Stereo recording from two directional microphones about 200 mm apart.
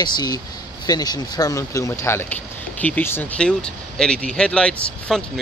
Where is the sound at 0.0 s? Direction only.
20° left (ahead or behind).